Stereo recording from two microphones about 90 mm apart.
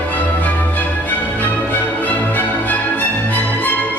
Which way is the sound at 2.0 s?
15° left (ahead or behind).